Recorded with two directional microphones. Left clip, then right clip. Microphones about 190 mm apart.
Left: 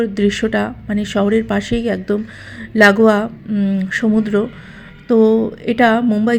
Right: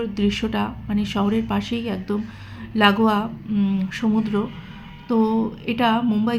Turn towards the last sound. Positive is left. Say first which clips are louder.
# left 7 dB
turn(degrees=30)  # may be behind; listen again after turning